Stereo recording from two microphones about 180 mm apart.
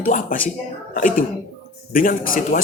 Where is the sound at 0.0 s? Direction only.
45° left (ahead or behind).